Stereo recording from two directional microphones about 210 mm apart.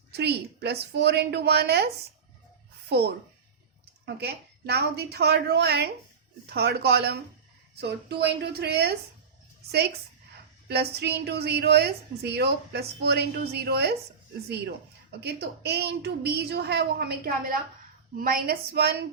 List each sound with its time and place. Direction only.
0.1 s a woman's voice: 50° right (ahead or behind)
4.0 s a woman's voice: 50° right (ahead or behind)
10.7 s a woman's voice: 50° right (ahead or behind)
15.2 s a woman's voice: 50° right (ahead or behind)